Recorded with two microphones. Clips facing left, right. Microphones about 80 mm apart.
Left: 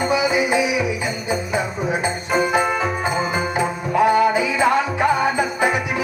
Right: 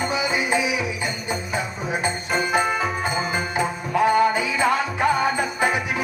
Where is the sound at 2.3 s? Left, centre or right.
Centre.